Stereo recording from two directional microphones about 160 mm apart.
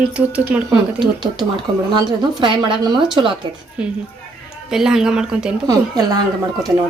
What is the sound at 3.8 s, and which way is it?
Speech, 5° right (ahead or behind).